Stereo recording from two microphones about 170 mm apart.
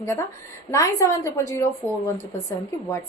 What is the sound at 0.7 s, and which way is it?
Speech, 20° left (ahead or behind).